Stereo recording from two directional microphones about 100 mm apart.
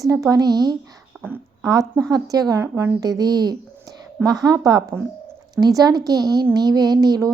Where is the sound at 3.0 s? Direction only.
40° right (ahead or behind).